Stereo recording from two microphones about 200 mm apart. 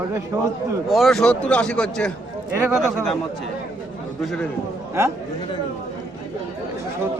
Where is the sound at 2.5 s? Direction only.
15° right (ahead or behind).